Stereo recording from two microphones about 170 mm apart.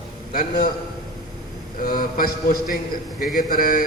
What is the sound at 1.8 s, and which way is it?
A man's voice, 55° left (ahead or behind).